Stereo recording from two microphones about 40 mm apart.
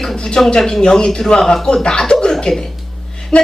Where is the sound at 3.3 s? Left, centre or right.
Centre.